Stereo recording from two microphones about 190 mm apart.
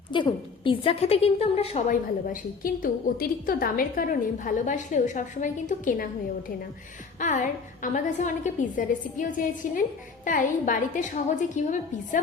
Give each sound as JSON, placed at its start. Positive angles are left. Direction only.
{"t": 0.1, "sound": "a woman's voice", "side_deg": 25}
{"t": 1.9, "sound": "a woman's voice", "side_deg": 45}
{"t": 7.2, "sound": "a woman's voice", "side_deg": 40}